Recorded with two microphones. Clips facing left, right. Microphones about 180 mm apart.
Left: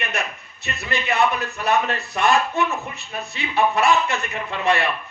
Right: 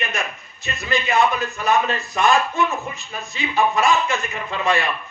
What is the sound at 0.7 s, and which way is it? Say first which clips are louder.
A man's voice: right 3 dB; 65° left (ahead or behind).